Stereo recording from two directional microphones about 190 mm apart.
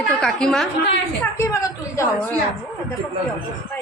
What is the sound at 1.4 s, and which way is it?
Speech, 15° left (ahead or behind).